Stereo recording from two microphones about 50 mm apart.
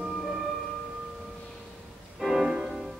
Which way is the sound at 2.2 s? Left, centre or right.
Centre.